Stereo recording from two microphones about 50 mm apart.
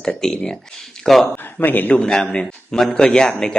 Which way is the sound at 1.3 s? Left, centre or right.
Left.